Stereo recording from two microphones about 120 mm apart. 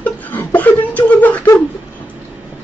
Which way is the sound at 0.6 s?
15° left (ahead or behind).